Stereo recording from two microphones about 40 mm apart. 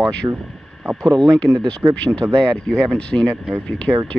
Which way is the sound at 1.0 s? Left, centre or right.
Centre.